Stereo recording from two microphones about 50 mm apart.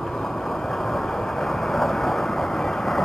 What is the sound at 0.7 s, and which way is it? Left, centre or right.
Vehicle, centre.